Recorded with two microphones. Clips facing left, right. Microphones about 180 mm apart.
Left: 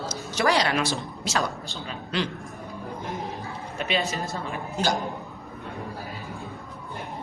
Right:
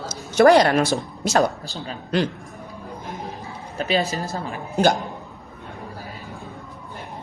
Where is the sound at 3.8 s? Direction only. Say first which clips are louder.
Right 5 dB; 35° right (ahead or behind).